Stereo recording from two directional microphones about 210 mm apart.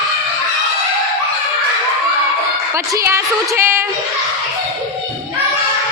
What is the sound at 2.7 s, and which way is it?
A woman's voice, 15° right (ahead or behind).